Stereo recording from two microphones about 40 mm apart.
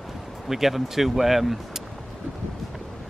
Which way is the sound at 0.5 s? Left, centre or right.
Centre.